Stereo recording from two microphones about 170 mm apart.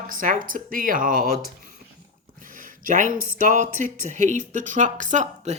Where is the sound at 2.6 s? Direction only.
50° right (ahead or behind).